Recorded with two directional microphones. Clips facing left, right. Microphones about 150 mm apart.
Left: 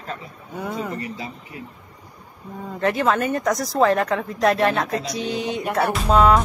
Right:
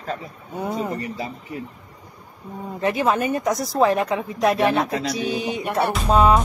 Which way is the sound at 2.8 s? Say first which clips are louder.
Even; 20° right (ahead or behind).